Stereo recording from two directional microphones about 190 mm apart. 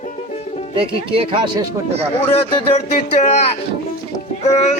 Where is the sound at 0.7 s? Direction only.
30° right (ahead or behind).